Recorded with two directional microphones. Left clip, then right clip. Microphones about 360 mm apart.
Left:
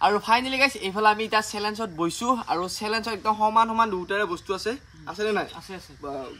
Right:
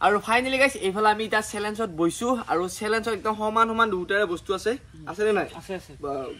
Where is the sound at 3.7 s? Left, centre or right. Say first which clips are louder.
Right 1 dB; centre.